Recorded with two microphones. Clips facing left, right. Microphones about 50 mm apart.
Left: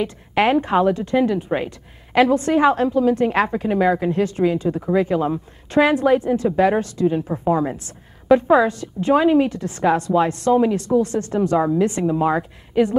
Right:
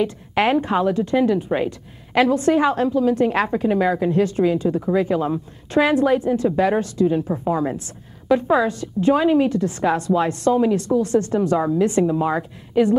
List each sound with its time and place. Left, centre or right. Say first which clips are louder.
0.4 s a woman's voice: left 2 dB; centre